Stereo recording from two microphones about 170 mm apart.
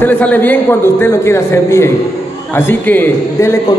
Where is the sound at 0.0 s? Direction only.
10° left (ahead or behind).